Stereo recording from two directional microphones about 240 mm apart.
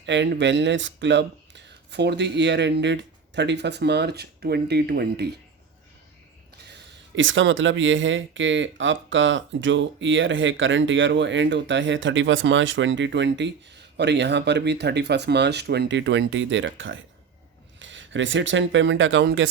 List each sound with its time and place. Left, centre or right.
0.0 s speech: right
7.2 s speech: right